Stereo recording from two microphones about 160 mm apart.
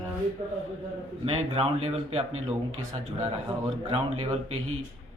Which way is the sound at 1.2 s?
40° right (ahead or behind).